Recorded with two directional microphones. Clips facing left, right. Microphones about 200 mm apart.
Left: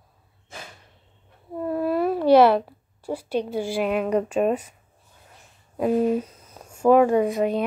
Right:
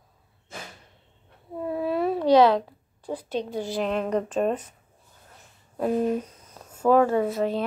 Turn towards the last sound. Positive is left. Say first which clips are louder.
# left 3 dB
turn(degrees=15)  # may be behind; listen again after turning